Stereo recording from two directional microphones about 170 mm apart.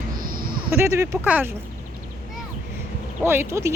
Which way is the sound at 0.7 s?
15° right (ahead or behind).